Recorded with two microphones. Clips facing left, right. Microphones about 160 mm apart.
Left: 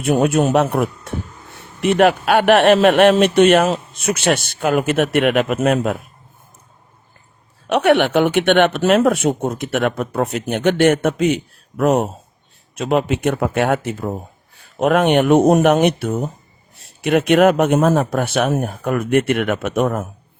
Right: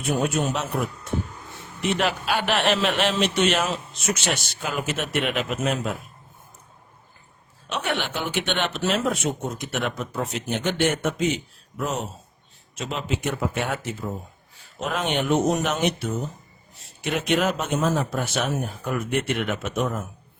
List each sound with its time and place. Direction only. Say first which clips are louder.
0.0 s a man's voice: left 8 dB; 60° left (ahead or behind)
7.7 s a man's voice: left 14 dB; 65° left (ahead or behind)